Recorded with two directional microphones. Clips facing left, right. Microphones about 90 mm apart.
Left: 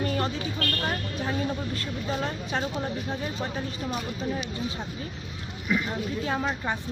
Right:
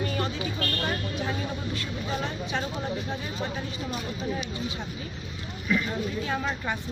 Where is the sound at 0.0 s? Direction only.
40° left (ahead or behind).